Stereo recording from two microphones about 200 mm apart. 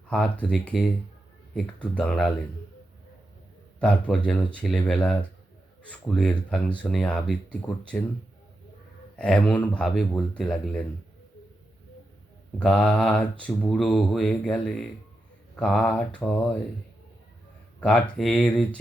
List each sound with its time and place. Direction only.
0.1 s speech: 5° left (ahead or behind)
3.8 s speech: 5° left (ahead or behind)
9.1 s speech: 5° left (ahead or behind)
12.5 s speech: 5° left (ahead or behind)
17.7 s speech: 5° left (ahead or behind)